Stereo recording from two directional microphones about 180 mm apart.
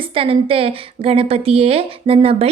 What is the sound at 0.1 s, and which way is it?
A woman's voice, 30° right (ahead or behind).